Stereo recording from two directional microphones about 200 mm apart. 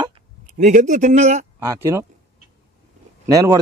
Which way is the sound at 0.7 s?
40° right (ahead or behind).